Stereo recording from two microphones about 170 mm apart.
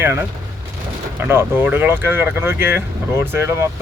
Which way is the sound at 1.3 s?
10° right (ahead or behind).